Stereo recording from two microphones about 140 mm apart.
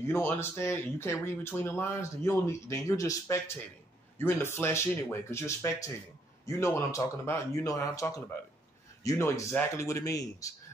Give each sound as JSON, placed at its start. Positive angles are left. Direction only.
{"t": 0.0, "sound": "speech", "side_deg": 20}